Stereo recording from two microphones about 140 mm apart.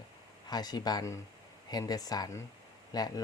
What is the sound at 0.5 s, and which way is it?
Speech, 30° left (ahead or behind).